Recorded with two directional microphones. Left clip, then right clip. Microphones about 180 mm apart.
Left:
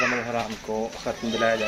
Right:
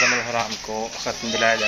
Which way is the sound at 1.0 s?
5° left (ahead or behind).